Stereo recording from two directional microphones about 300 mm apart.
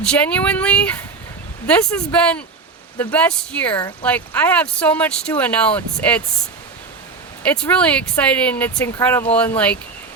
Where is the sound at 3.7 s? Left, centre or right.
Centre.